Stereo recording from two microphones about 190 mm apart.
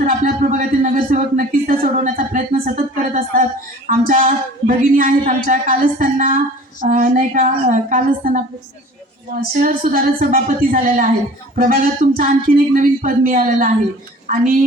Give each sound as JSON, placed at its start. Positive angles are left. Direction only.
{"t": 0.0, "sound": "a sound", "side_deg": -45}
{"t": 3.8, "sound": "speech", "side_deg": -45}
{"t": 9.6, "sound": "speech", "side_deg": -45}